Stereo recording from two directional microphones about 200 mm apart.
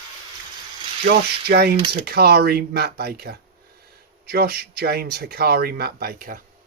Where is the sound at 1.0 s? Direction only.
50° right (ahead or behind).